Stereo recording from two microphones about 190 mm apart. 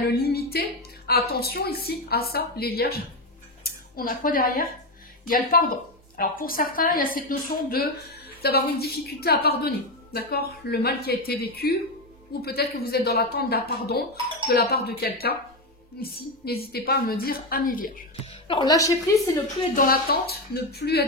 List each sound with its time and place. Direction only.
0.1 s a woman's voice: 55° left (ahead or behind)
18.2 s a woman's voice: 25° left (ahead or behind)
19.7 s a woman's voice: 50° left (ahead or behind)